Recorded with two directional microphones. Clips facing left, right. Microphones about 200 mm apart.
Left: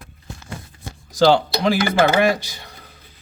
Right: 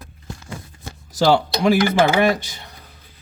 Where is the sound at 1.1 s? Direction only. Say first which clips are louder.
Left 2 dB; 5° right (ahead or behind).